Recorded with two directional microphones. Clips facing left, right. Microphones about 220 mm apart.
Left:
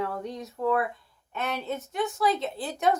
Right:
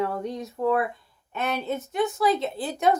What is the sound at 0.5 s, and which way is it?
Speech, 15° right (ahead or behind).